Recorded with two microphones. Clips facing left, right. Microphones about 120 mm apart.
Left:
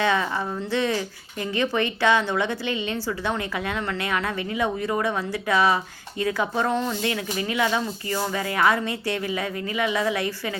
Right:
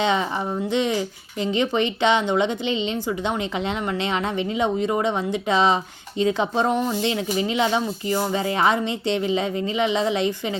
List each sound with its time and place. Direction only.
0.0 s speech: 20° right (ahead or behind)